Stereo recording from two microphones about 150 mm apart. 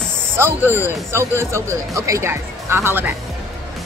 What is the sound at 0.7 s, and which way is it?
Speech, 15° right (ahead or behind).